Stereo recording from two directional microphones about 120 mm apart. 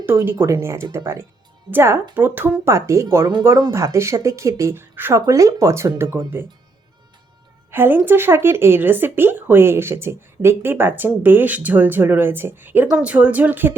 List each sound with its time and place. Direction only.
0.3 s speech: 20° right (ahead or behind)
7.7 s a woman's voice: 15° right (ahead or behind)